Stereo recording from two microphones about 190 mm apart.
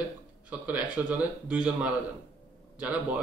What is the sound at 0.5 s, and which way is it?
Speech, 10° right (ahead or behind).